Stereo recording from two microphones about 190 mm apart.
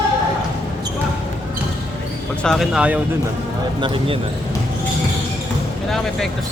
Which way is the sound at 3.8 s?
25° right (ahead or behind).